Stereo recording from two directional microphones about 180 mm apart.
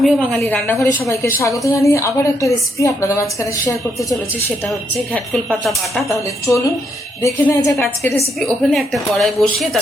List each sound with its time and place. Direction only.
0.0 s a woman's voice: centre (ahead or behind); by 3.2 s 15° left (ahead or behind)
5.1 s a woman's voice: 5° left (ahead or behind)
6.1 s a woman's voice: 15° left (ahead or behind)
8.7 s a woman's voice: centre (ahead or behind)